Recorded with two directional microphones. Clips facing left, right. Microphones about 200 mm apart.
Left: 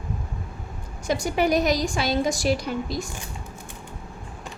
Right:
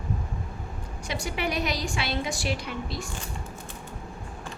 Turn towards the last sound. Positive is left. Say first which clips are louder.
# left 6 dB
turn(degrees=40)  # may be behind; listen again after turning